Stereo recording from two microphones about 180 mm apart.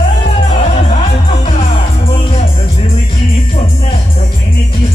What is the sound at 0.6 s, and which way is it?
Music, 40° left (ahead or behind).